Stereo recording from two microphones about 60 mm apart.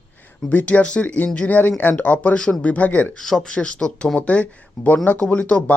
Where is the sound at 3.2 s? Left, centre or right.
Centre.